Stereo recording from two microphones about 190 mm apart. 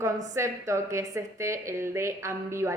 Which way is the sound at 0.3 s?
15° right (ahead or behind).